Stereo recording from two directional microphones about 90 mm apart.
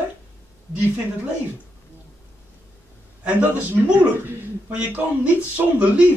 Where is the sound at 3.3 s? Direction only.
15° right (ahead or behind).